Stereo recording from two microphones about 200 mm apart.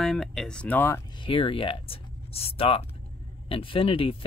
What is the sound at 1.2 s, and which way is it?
Speech, 25° left (ahead or behind).